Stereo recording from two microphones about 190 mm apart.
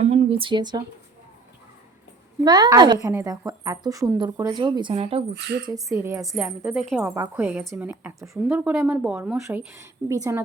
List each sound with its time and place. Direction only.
0.0 s a sound: 35° right (ahead or behind)
2.4 s speech: 20° right (ahead or behind)
5.3 s speech: 60° right (ahead or behind)
5.6 s a woman's voice: 15° right (ahead or behind)